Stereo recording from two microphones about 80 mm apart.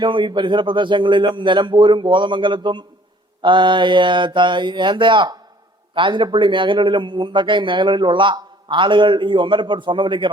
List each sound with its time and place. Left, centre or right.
0.0 s speech: right
5.9 s a man's voice: right